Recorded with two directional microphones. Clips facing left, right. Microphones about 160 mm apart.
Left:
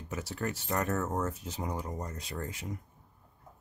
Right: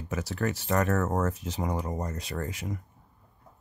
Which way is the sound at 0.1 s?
90° right.